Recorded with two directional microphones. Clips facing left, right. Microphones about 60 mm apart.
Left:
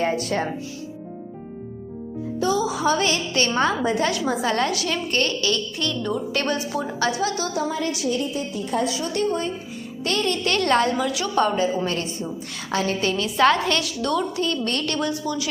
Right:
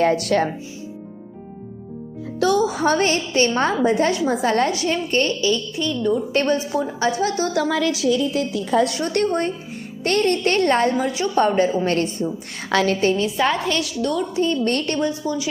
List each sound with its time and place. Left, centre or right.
0.0 s speech: right
2.6 s a woman's voice: right; by 6.1 s centre
6.3 s a woman's voice: right
7.5 s a woman's voice: right
8.9 s a woman's voice: right
11.9 s a woman's voice: right
13.0 s a woman's voice: right
13.3 s a woman's voice: centre
14.3 s a woman's voice: right
14.7 s a child's voice: right
14.9 s speech: centre